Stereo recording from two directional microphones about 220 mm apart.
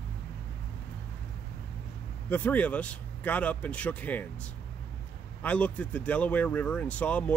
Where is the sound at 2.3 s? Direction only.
5° left (ahead or behind).